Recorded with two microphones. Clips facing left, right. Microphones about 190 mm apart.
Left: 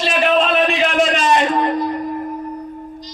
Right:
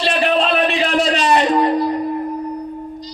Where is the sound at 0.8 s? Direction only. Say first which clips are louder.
Even; 35° right (ahead or behind).